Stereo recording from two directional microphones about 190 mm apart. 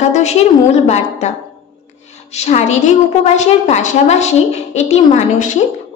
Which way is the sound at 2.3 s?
35° left (ahead or behind).